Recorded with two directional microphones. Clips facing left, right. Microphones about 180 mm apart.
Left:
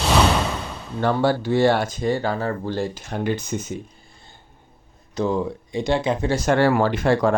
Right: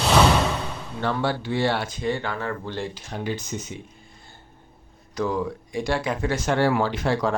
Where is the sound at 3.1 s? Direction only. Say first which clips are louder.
Left 5 dB; 55° left (ahead or behind).